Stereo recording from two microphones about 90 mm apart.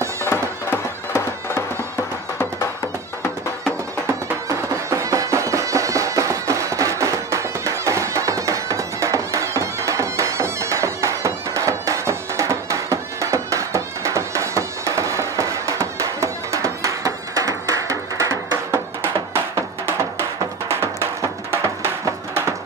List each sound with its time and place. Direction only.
0.3 s music: 30° left (ahead or behind)
4.5 s music: 35° right (ahead or behind)